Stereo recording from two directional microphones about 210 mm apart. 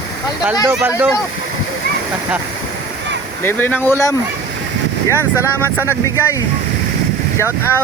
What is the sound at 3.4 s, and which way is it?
Speech, 10° left (ahead or behind).